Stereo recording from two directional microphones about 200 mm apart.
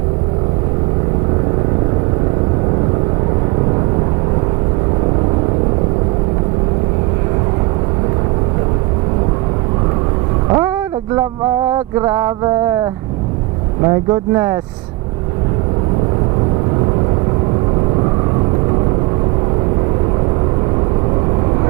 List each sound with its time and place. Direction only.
10.5 s vehicle: 15° right (ahead or behind)
11.7 s a sound: 15° right (ahead or behind)
13.8 s speech: 15° right (ahead or behind)